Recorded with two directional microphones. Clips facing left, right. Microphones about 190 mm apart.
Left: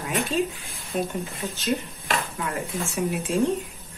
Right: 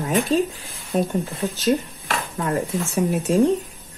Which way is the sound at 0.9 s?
45° right (ahead or behind).